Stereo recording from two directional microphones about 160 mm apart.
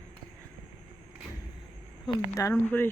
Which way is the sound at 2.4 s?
15° left (ahead or behind).